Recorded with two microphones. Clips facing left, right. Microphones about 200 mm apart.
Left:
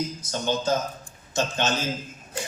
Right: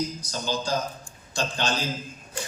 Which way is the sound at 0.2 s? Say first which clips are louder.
Left 3 dB; 25° left (ahead or behind).